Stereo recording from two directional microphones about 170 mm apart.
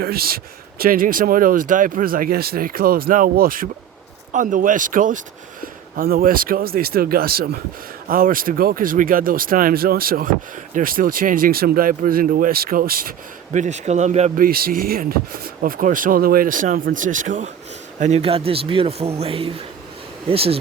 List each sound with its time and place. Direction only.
0.0 s speech: 65° right (ahead or behind)
18.0 s a man's voice: 40° right (ahead or behind)